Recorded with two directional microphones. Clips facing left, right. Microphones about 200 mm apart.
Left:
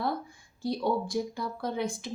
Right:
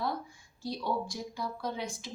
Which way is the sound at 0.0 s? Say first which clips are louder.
Left 3 dB; 55° left (ahead or behind).